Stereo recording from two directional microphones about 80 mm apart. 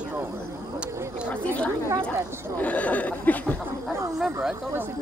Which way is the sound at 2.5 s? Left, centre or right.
Centre.